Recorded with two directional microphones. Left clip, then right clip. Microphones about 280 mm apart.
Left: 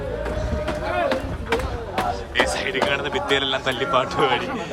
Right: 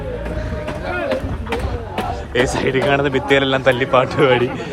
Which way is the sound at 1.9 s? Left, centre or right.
Centre.